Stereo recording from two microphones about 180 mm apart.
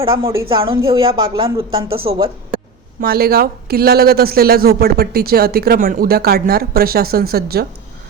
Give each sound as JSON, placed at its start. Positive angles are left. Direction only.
{"t": 0.1, "sound": "a woman's voice", "side_deg": -15}
{"t": 0.4, "sound": "speech", "side_deg": -30}
{"t": 3.0, "sound": "a man's voice", "side_deg": -55}